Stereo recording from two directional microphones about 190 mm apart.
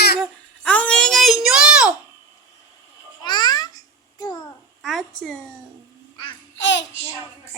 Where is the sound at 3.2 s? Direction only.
20° left (ahead or behind).